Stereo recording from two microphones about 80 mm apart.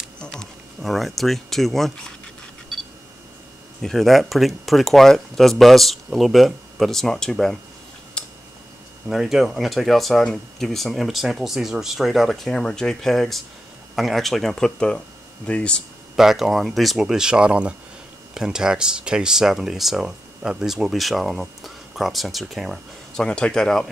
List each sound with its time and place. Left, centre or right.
0.2 s speech: centre
3.8 s speech: centre
8.2 s a sound: centre
9.1 s speech: centre
16.2 s speech: centre
23.2 s speech: centre